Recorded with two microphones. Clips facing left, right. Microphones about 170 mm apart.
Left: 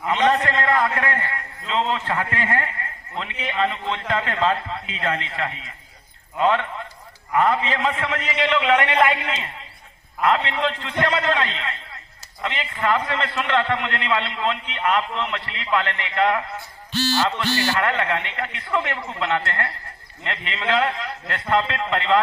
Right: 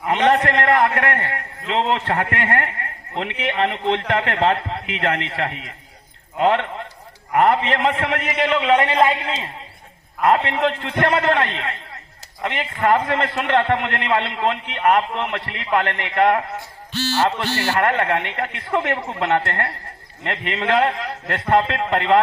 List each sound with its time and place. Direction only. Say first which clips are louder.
0.1 s a man's voice: right 3 dB; 60° right (ahead or behind); by 9.5 s 30° right (ahead or behind)
10.2 s a man's voice: right 3 dB; 50° right (ahead or behind)
17.4 s a man's voice: right 2 dB; 50° right (ahead or behind)